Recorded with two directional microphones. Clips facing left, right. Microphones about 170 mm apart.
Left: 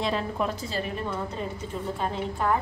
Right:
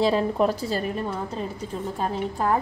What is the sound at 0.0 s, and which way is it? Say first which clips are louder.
A woman's voice: right 7 dB; 35° right (ahead or behind).